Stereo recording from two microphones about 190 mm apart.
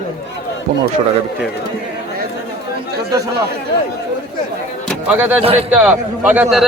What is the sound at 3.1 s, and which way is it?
Speech, 20° right (ahead or behind).